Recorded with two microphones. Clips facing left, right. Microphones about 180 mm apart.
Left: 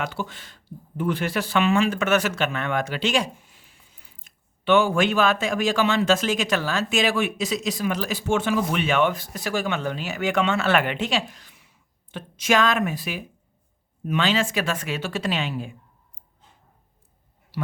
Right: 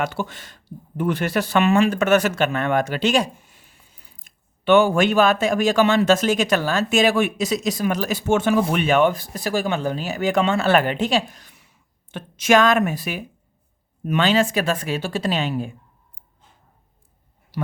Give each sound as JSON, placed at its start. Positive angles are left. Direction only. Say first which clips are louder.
{"t": 0.2, "sound": "speech", "louder": "right 3 dB", "side_deg": -45}